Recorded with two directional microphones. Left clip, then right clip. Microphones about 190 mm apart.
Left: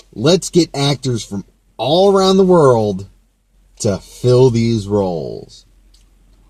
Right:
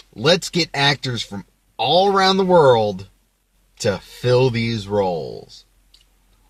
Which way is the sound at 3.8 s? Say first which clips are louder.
Left 3 dB; 30° right (ahead or behind).